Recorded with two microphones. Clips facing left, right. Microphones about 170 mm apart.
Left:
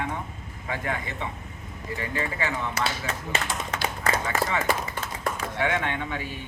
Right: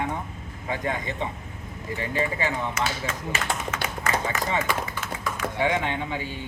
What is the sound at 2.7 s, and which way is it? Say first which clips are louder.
Speech: right 1 dB; 35° left (ahead or behind).